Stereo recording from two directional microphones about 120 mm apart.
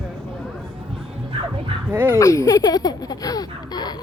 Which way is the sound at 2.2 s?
30° left (ahead or behind).